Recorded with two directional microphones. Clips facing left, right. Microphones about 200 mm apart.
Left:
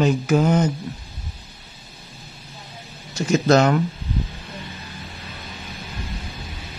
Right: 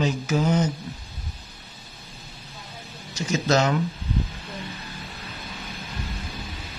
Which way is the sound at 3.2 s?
55° left (ahead or behind).